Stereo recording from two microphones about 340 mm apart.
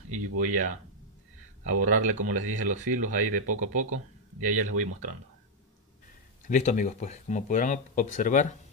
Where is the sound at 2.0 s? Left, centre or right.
Right.